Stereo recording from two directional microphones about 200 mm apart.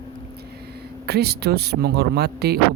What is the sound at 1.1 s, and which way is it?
Speech, 55° right (ahead or behind).